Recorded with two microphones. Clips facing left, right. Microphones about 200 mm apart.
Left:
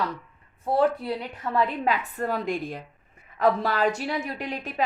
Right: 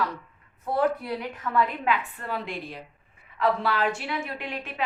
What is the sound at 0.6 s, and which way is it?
A woman's voice, 30° left (ahead or behind).